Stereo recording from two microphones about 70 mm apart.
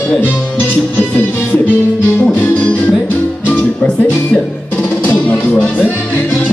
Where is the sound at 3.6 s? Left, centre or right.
Centre.